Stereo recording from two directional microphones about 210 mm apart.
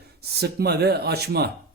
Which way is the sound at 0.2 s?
50° right (ahead or behind).